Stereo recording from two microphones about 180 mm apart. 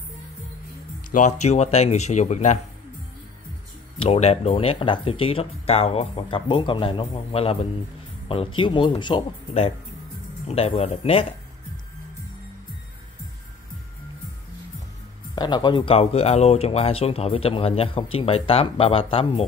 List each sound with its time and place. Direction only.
1.1 s speech: 40° left (ahead or behind)
4.0 s speech: 35° left (ahead or behind)
15.3 s speech: 25° left (ahead or behind)